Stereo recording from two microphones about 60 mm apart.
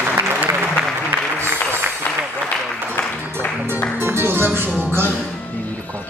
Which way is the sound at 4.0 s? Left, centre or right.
Right.